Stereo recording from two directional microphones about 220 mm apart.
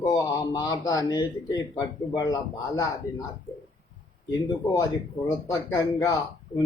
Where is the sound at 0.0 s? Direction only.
15° left (ahead or behind).